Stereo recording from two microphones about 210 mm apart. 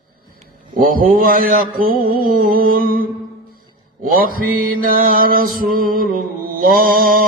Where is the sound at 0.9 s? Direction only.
45° right (ahead or behind).